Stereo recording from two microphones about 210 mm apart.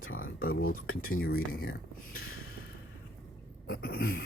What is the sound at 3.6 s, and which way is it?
Speech, 45° left (ahead or behind).